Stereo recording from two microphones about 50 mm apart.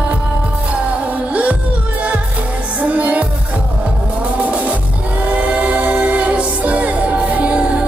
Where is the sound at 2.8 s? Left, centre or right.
Right.